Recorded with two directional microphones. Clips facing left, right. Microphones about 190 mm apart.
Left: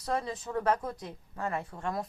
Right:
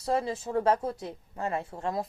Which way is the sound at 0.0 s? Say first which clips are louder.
Right 4 dB; 25° right (ahead or behind).